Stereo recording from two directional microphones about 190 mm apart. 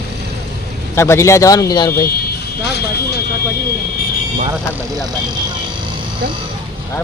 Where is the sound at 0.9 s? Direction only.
15° left (ahead or behind).